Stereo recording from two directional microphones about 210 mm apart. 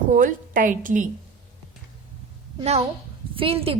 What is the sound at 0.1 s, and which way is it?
A woman's voice, 40° right (ahead or behind).